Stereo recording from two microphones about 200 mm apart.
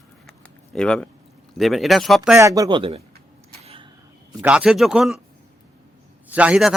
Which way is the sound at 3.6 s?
25° right (ahead or behind).